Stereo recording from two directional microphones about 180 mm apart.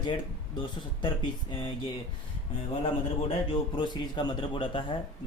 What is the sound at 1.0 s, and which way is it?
Speech, 30° left (ahead or behind).